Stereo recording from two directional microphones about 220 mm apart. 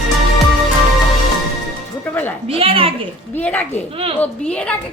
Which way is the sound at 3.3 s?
10° left (ahead or behind).